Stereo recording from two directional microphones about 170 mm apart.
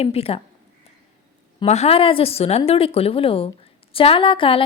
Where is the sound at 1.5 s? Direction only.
40° left (ahead or behind).